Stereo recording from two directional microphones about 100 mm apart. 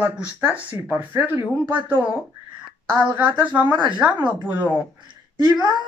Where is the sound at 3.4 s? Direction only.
15° right (ahead or behind).